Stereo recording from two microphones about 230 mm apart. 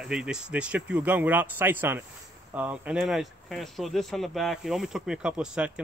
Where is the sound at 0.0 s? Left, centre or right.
Centre.